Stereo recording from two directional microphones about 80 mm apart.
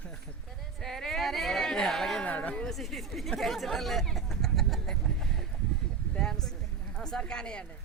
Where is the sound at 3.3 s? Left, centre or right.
Centre.